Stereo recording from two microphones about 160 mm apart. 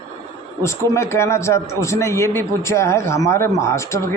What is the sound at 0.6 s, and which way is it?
Speech, 15° left (ahead or behind).